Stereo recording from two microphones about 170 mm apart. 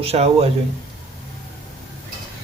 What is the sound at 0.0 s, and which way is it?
Speech, 35° right (ahead or behind).